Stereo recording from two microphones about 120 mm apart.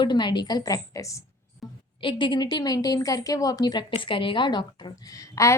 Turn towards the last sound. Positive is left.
turn(degrees=25)  # may be behind; listen again after turning